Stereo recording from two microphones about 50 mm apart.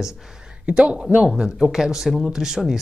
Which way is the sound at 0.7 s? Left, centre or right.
Right.